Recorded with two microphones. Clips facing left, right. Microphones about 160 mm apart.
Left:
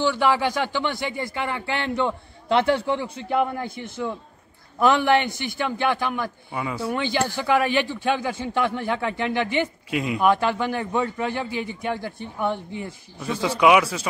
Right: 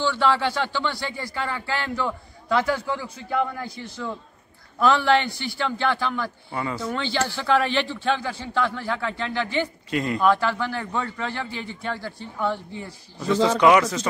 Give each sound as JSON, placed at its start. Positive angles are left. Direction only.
{"t": 0.0, "sound": "speech", "side_deg": 15}
{"t": 4.7, "sound": "a man's voice", "side_deg": 15}
{"t": 9.8, "sound": "speech", "side_deg": 5}
{"t": 10.2, "sound": "a man's voice", "side_deg": 20}